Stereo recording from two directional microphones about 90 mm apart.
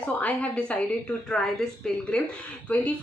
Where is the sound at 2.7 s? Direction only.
20° left (ahead or behind).